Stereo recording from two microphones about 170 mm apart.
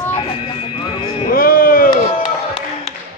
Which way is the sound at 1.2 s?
60° left (ahead or behind).